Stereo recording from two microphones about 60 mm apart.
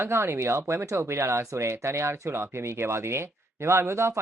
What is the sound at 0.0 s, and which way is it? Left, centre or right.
Speech, right.